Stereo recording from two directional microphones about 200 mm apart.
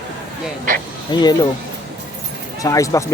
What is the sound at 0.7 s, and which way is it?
Speech, 40° right (ahead or behind).